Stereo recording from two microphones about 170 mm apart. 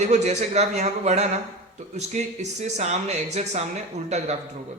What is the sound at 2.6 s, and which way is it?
Speech, 40° right (ahead or behind).